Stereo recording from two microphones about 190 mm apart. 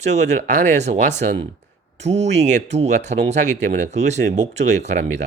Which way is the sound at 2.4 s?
35° right (ahead or behind).